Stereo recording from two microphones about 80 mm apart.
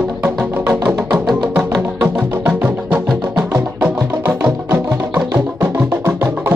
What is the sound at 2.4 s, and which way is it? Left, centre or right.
Music, right.